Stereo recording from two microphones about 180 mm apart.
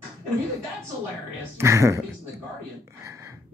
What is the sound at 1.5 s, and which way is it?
Speech, 15° right (ahead or behind).